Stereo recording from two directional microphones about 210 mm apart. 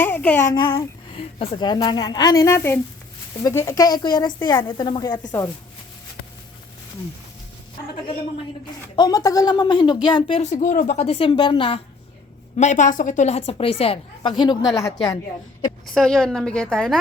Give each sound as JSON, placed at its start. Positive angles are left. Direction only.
{"t": 0.0, "sound": "a child's voice", "side_deg": 10}
{"t": 9.0, "sound": "a woman's voice", "side_deg": 15}
{"t": 12.5, "sound": "a woman's voice", "side_deg": 35}
{"t": 14.6, "sound": "a woman's voice", "side_deg": 0}
{"t": 14.8, "sound": "a child's voice", "side_deg": 15}
{"t": 16.0, "sound": "a woman's voice", "side_deg": 0}